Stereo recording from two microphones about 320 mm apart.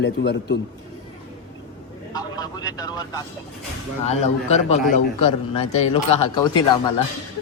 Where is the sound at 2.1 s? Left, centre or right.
Centre.